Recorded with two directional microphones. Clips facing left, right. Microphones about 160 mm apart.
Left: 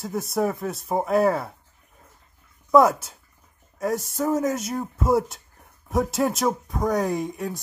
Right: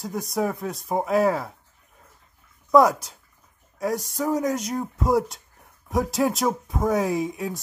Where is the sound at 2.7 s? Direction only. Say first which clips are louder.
Even; centre (ahead or behind).